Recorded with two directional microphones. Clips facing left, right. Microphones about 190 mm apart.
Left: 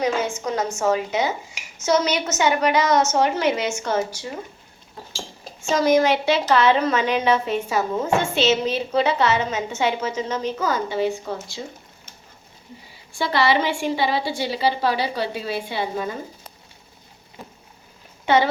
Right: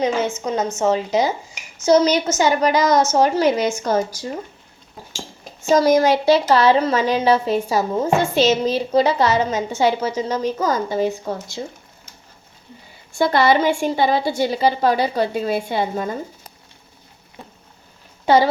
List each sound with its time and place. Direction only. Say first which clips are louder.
0.0 s a woman's voice: right 2 dB; 25° right (ahead or behind)
5.6 s a woman's voice: right 3 dB; 40° right (ahead or behind)
13.1 s a woman's voice: right 4 dB; 45° right (ahead or behind)
17.4 s a sound: even; centre (ahead or behind)
18.3 s a woman's voice: right 3 dB; 35° right (ahead or behind)